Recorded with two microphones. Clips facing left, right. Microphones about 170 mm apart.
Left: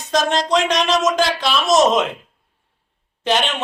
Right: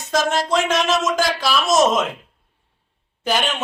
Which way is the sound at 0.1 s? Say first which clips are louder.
Left 2 dB; 5° right (ahead or behind).